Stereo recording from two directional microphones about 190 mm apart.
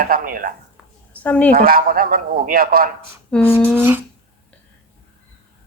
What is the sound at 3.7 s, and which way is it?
Speech, 10° right (ahead or behind).